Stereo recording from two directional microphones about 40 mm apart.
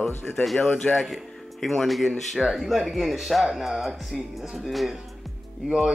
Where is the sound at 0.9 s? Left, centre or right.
Centre.